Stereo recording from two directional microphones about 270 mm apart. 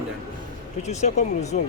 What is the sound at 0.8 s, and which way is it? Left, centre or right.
Speech, left.